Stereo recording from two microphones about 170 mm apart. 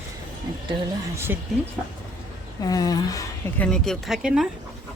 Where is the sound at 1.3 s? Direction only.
10° right (ahead or behind).